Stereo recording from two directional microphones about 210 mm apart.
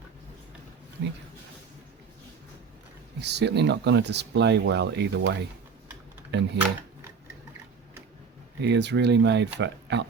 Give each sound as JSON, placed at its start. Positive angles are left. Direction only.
{"t": 1.0, "sound": "speech", "side_deg": -55}
{"t": 3.2, "sound": "speech", "side_deg": -55}
{"t": 8.6, "sound": "speech", "side_deg": -55}